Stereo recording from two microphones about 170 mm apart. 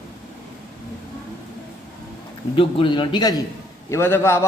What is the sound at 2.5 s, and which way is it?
Speech, 30° left (ahead or behind).